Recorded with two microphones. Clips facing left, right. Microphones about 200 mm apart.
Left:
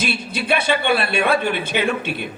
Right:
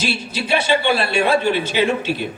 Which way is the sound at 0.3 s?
55° left (ahead or behind).